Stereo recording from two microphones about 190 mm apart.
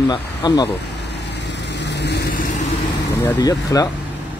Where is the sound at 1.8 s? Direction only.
65° left (ahead or behind).